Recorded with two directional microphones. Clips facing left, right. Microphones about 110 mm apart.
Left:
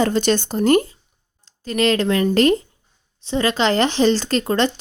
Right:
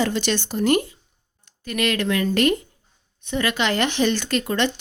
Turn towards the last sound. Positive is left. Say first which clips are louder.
# left 4 dB
turn(degrees=35)  # may be behind; listen again after turning